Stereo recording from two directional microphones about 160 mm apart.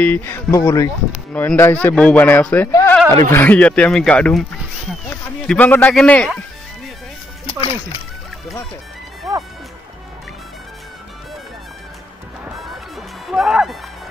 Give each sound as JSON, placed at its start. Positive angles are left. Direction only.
{"t": 0.0, "sound": "speech", "side_deg": 10}
{"t": 1.3, "sound": "speech", "side_deg": 10}
{"t": 5.5, "sound": "speech", "side_deg": 10}
{"t": 13.3, "sound": "music", "side_deg": 0}